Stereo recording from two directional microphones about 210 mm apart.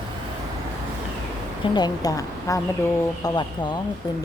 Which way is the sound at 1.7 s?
20° left (ahead or behind).